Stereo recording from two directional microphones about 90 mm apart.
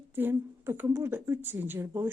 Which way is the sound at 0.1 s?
25° right (ahead or behind).